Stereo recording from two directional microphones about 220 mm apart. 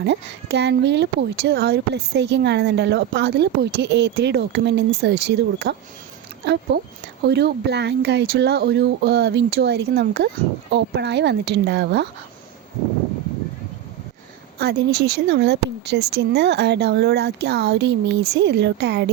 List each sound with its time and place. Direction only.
0.0 s speech: 50° right (ahead or behind)
6.7 s speech: 50° right (ahead or behind)
14.6 s speech: 45° right (ahead or behind)